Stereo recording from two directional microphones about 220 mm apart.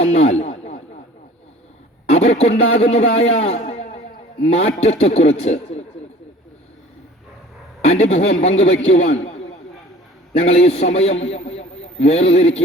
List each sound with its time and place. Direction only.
0.0 s a sound: 30° left (ahead or behind)
2.1 s a man's voice: 30° left (ahead or behind)
7.9 s a man's voice: 30° left (ahead or behind)